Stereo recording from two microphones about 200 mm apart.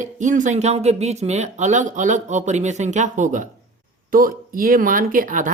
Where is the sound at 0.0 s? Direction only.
40° right (ahead or behind).